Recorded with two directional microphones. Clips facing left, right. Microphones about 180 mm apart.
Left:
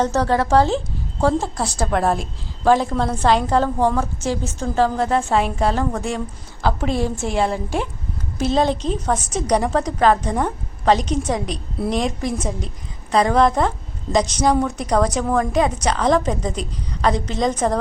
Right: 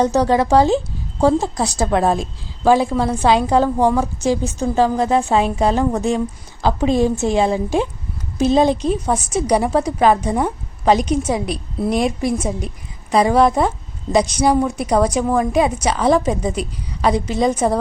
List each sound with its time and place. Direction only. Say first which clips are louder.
0.0 s a woman's voice: right 3 dB; 15° right (ahead or behind)